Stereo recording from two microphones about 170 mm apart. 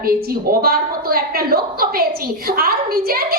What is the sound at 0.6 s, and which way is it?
A child's voice, 65° right (ahead or behind).